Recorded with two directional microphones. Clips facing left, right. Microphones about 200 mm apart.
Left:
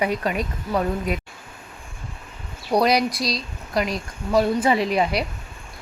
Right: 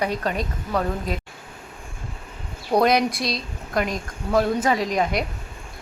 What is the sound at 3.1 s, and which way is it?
Speech, 55° right (ahead or behind).